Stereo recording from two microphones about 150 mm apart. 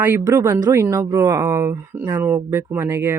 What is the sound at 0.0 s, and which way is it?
Speech, 15° right (ahead or behind).